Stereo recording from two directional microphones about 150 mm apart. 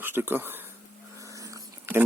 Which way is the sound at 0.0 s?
15° right (ahead or behind).